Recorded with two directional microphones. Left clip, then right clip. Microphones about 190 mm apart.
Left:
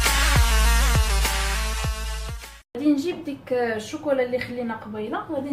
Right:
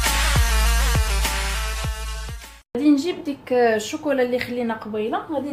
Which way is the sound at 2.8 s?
35° right (ahead or behind).